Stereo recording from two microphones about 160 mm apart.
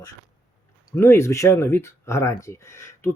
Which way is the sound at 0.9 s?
15° left (ahead or behind).